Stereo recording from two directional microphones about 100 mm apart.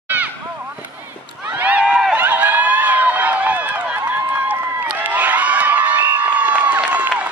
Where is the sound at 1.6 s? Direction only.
15° right (ahead or behind).